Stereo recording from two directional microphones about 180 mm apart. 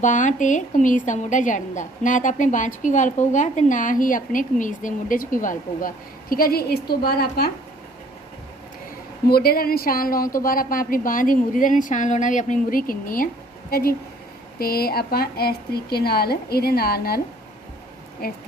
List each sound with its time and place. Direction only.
0.0 s a woman's voice: 45° left (ahead or behind); by 7.5 s 60° left (ahead or behind)
9.2 s a woman's voice: 60° left (ahead or behind)
18.2 s speech: 60° left (ahead or behind)